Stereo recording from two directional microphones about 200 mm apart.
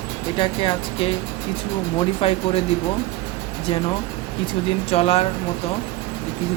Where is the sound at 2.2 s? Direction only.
30° left (ahead or behind).